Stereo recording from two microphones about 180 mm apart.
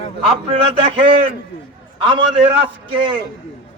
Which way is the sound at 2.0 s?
30° right (ahead or behind).